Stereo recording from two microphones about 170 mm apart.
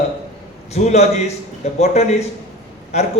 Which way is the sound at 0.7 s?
40° left (ahead or behind).